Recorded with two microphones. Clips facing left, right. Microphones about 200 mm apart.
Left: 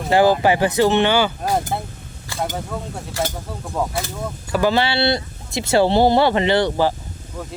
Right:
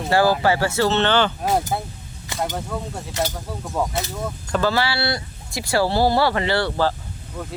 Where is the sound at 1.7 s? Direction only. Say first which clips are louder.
Even; centre (ahead or behind).